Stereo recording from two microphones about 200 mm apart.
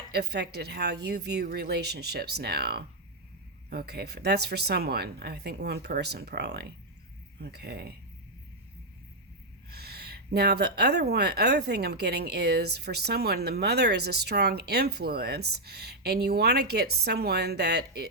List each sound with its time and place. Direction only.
0.1 s speech: 55° right (ahead or behind)
9.6 s speech: 50° right (ahead or behind)